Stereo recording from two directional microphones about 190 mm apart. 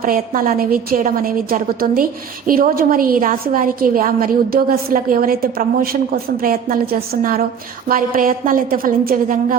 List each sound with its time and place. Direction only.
0.0 s a woman's voice: 45° right (ahead or behind)